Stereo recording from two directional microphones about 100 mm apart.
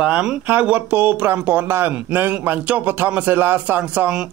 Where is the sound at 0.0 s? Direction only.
10° right (ahead or behind).